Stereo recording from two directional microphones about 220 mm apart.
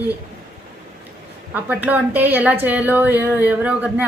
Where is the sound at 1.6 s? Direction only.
5° right (ahead or behind).